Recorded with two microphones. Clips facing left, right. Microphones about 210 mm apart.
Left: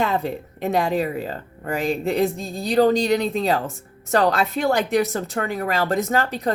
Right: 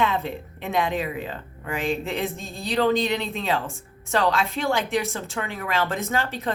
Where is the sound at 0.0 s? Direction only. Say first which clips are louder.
Left 2 dB; 40° left (ahead or behind).